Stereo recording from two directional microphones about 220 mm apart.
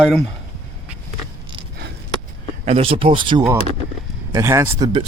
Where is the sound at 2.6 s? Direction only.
25° right (ahead or behind).